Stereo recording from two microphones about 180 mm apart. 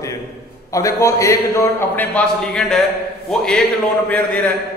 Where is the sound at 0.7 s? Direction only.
15° left (ahead or behind).